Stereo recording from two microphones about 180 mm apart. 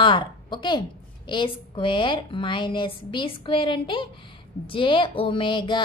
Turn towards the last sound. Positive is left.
turn(degrees=25)  # may be behind; listen again after turning